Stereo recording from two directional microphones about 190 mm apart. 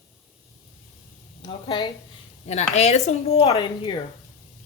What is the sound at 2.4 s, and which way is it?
A woman's voice, 35° left (ahead or behind).